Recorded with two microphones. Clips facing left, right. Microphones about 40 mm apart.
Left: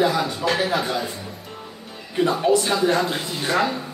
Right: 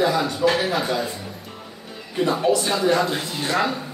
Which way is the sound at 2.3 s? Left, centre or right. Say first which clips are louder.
Even; centre.